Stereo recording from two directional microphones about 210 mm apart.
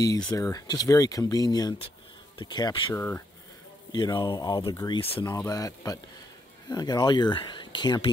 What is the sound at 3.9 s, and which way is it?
A man's voice, 20° left (ahead or behind).